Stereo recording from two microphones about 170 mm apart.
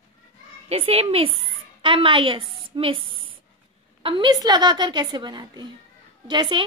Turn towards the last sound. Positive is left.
turn(degrees=-30)  # may be behind; listen again after turning